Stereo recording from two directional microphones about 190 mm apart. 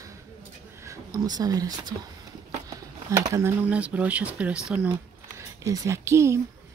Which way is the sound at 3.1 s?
15° right (ahead or behind).